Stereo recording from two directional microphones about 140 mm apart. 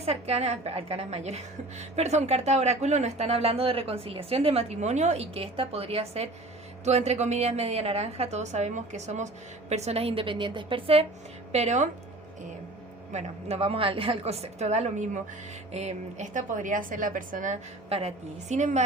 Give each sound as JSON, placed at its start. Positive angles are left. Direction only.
{"t": 0.0, "sound": "speech", "side_deg": -50}
{"t": 11.5, "sound": "speech", "side_deg": -55}
{"t": 13.1, "sound": "a woman's voice", "side_deg": -45}